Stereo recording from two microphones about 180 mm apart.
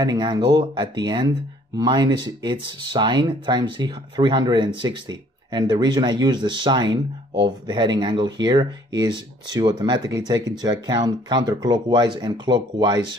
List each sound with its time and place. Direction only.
0.0 s speech: 25° right (ahead or behind)